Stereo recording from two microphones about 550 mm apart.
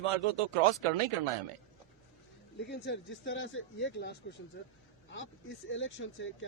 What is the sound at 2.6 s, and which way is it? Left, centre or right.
Speech, centre.